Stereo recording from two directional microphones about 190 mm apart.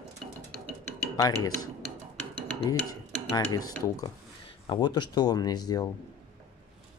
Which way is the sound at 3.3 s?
20° left (ahead or behind).